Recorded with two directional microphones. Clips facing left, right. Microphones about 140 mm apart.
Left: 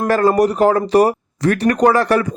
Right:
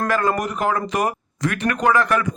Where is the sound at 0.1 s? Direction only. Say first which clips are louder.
Left 7 dB; 35° left (ahead or behind).